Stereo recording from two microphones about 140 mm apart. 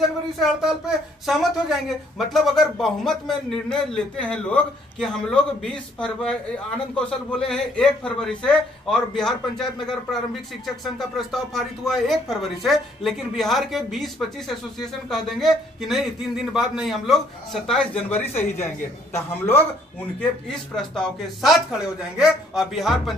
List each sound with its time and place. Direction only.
0.4 s a man's voice: 5° right (ahead or behind); by 19.6 s 15° left (ahead or behind)
20.2 s speech: 5° left (ahead or behind)